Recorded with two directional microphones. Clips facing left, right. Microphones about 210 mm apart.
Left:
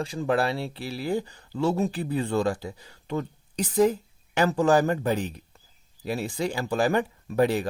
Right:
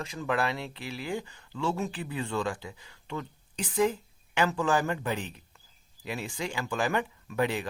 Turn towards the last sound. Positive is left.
turn(degrees=40)  # may be behind; listen again after turning